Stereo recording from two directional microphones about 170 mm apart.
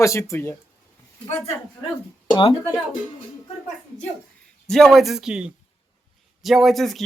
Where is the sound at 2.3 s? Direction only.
30° left (ahead or behind).